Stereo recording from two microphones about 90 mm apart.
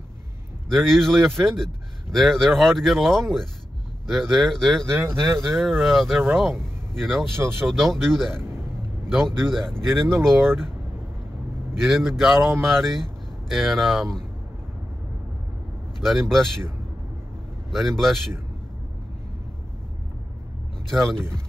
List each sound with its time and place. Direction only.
0.7 s speech: 5° left (ahead or behind)
4.9 s speech: 30° right (ahead or behind)
5.5 s speech: centre (ahead or behind)
7.3 s speech: 25° right (ahead or behind)
7.6 s speech: 5° left (ahead or behind)
11.8 s speech: centre (ahead or behind)
16.0 s speech: centre (ahead or behind)
17.6 s speech: 5° left (ahead or behind)
20.9 s speech: 5° left (ahead or behind)